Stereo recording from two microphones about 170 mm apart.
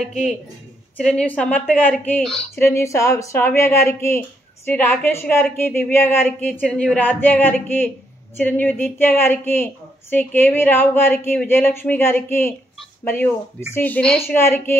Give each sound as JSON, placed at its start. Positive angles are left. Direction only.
{"t": 0.9, "sound": "a woman's voice", "side_deg": 5}
{"t": 2.5, "sound": "a woman's voice", "side_deg": 15}